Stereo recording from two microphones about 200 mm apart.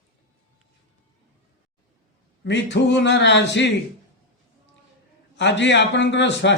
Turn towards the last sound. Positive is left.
turn(degrees=60)  # may be behind; listen again after turning